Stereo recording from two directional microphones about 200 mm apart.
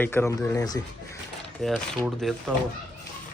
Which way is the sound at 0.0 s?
10° left (ahead or behind).